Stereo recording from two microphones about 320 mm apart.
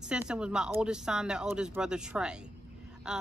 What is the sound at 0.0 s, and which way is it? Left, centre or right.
Speech, centre.